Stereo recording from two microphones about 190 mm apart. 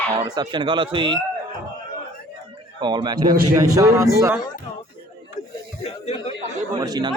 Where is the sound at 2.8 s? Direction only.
25° right (ahead or behind).